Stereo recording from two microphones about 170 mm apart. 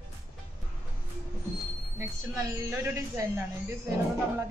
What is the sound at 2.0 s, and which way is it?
A woman's voice, 15° right (ahead or behind).